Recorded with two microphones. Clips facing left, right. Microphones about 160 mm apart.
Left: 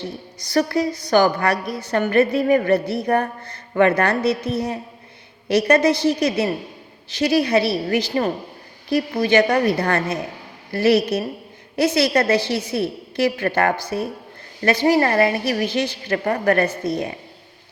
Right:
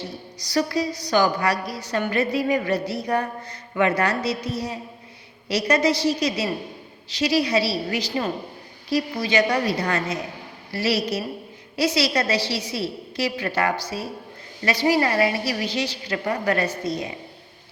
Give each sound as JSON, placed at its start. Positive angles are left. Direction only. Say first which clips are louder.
{"t": 0.3, "sound": "a woman's voice", "louder": "left 3 dB", "side_deg": 55}